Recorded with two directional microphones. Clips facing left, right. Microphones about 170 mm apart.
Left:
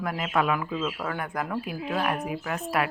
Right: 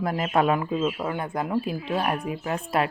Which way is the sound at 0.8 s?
20° right (ahead or behind).